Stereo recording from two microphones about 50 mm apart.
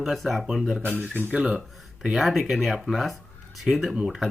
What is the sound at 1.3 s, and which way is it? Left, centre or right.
Speech, right.